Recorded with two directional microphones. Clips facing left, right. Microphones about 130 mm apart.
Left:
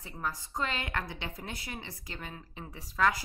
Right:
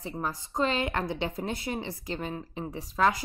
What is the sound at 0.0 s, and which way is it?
A woman's voice, 25° right (ahead or behind).